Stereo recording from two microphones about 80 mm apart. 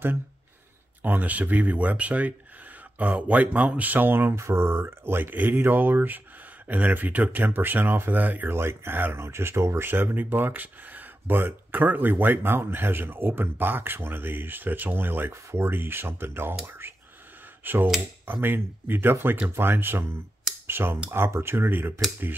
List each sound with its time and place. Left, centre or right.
1.0 s speech: centre